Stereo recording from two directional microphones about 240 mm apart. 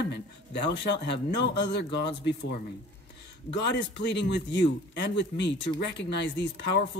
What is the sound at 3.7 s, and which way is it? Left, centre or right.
Speech, left.